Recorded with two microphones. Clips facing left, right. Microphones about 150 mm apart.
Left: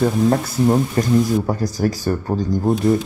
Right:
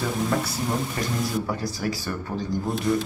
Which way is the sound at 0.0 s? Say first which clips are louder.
Left 8 dB; 45° left (ahead or behind).